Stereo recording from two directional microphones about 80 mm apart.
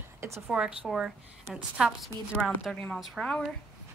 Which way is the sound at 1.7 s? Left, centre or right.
Centre.